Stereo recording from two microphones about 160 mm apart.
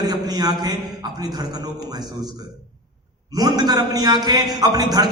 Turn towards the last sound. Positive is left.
turn(degrees=-25)  # may be behind; listen again after turning